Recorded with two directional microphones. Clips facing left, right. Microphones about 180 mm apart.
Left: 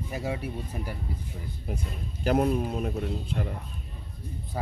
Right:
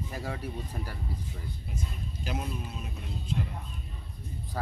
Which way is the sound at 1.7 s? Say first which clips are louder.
Left 5 dB; 60° left (ahead or behind).